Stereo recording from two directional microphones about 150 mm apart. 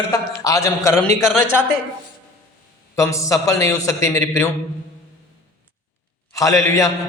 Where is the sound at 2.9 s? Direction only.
20° left (ahead or behind).